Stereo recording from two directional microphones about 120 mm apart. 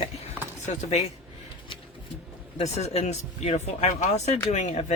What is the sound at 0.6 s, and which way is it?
Speech, 65° left (ahead or behind).